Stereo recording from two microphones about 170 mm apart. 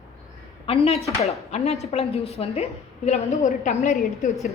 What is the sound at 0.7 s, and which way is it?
A woman's voice, 35° left (ahead or behind).